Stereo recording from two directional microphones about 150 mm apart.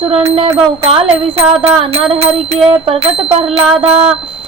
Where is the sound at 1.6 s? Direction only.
40° right (ahead or behind).